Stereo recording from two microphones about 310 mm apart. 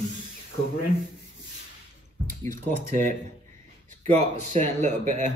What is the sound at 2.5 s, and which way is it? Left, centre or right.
Speech, right.